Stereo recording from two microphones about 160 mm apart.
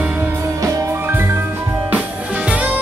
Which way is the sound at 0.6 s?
15° right (ahead or behind).